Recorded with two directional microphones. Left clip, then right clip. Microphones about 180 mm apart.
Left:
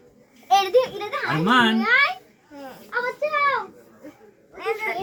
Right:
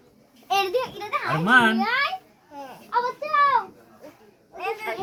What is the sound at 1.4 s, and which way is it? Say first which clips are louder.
Speech: even; 20° right (ahead or behind).